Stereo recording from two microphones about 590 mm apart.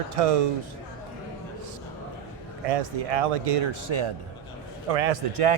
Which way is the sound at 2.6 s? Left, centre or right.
Right.